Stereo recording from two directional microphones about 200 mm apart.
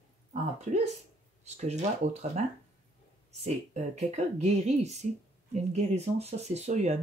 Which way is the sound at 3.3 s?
35° right (ahead or behind).